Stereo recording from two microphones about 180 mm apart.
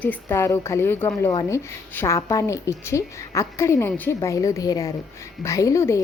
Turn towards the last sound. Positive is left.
turn(degrees=15)  # may be behind; listen again after turning